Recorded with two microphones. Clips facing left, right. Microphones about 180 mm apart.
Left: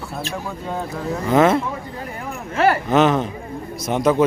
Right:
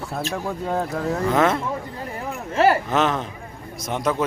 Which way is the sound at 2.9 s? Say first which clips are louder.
Left 5 dB; centre (ahead or behind).